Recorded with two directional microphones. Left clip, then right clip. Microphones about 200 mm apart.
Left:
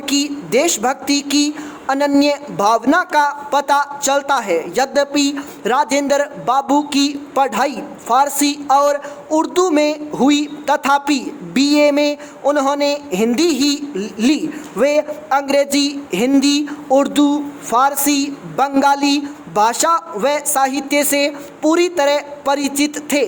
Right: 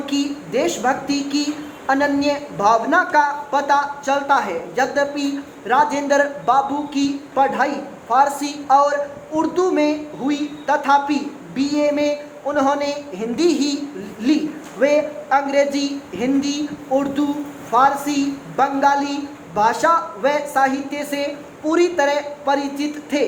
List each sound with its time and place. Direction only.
0.0 s a man's voice: 50° left (ahead or behind)